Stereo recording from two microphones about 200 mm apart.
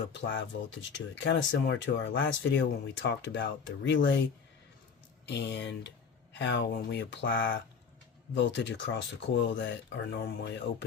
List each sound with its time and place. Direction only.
0.1 s speech: 65° left (ahead or behind)
5.3 s speech: 55° left (ahead or behind)